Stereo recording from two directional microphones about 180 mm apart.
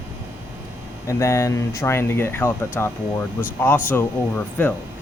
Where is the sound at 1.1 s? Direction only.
15° left (ahead or behind).